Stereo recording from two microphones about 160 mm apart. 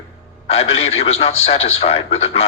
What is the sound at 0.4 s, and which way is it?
Speech, 40° left (ahead or behind).